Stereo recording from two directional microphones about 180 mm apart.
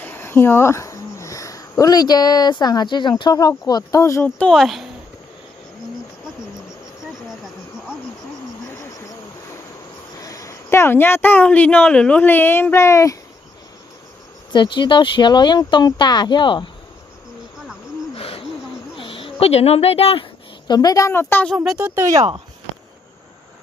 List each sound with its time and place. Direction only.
0.0 s speech: 10° left (ahead or behind)
10.2 s speech: 20° left (ahead or behind)
14.5 s speech: 25° left (ahead or behind)
18.1 s hoot: 30° left (ahead or behind)
18.9 s speech: 30° left (ahead or behind)
20.7 s a woman's voice: 20° left (ahead or behind)
21.5 s speech: centre (ahead or behind); by 22.4 s 20° right (ahead or behind)